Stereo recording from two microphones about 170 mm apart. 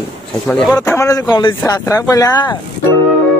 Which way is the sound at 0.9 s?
20° left (ahead or behind).